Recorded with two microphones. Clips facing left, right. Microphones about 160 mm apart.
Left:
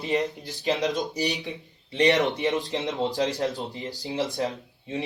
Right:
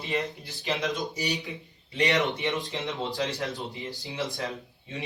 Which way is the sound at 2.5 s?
40° left (ahead or behind).